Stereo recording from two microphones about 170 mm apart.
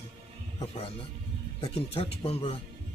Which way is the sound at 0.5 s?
30° left (ahead or behind).